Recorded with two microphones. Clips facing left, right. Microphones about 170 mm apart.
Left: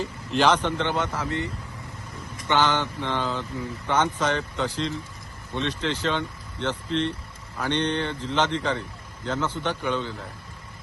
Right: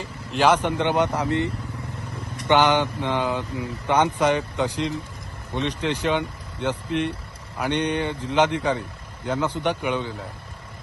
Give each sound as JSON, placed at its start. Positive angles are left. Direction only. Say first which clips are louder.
{"t": 0.3, "sound": "speech", "louder": "right 2 dB", "side_deg": -10}
{"t": 2.5, "sound": "speech", "louder": "right 4 dB", "side_deg": -15}